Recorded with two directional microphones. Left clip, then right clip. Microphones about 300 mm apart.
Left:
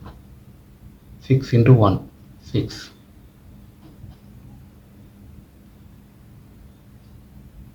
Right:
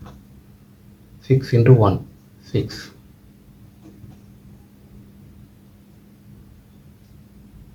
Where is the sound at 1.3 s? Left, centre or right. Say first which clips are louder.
Right 2 dB; centre.